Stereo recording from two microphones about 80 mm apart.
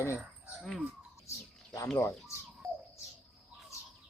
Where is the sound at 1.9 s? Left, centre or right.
Left.